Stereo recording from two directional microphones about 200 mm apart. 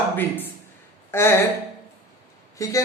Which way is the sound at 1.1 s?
15° left (ahead or behind).